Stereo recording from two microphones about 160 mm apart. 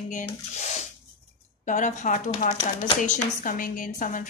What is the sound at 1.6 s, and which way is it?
Speech, 50° left (ahead or behind).